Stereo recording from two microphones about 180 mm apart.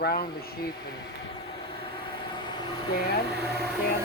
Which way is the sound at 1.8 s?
25° left (ahead or behind).